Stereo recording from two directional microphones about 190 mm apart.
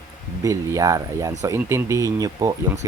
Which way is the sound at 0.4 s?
15° right (ahead or behind).